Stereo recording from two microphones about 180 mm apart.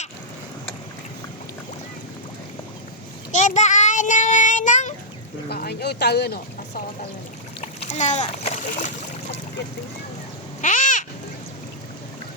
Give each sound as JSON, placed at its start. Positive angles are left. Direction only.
{"t": 3.3, "sound": "child singing", "side_deg": 40}
{"t": 5.5, "sound": "speech", "side_deg": 65}
{"t": 7.6, "sound": "a child's voice", "side_deg": 40}
{"t": 10.6, "sound": "owl", "side_deg": 45}